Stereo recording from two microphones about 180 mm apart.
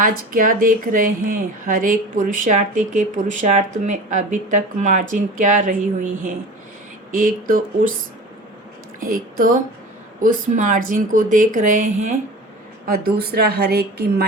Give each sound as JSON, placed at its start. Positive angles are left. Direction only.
{"t": 0.0, "sound": "a woman's voice", "side_deg": -50}
{"t": 9.0, "sound": "a woman's voice", "side_deg": -50}
{"t": 12.9, "sound": "a woman's voice", "side_deg": -60}